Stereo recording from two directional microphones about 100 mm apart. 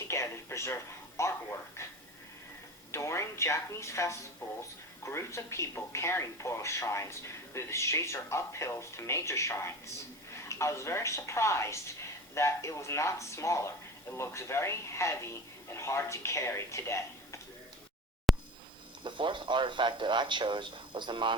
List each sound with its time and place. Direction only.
0.1 s speech: 30° left (ahead or behind)
2.9 s speech: 30° left (ahead or behind)
18.3 s a sound: centre (ahead or behind)
19.0 s speech: 55° right (ahead or behind)